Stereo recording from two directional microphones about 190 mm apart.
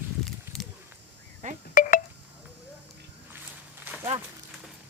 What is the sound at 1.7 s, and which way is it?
Telephone dialing, 40° left (ahead or behind).